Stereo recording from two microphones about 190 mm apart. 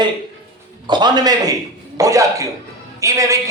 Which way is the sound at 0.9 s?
20° right (ahead or behind).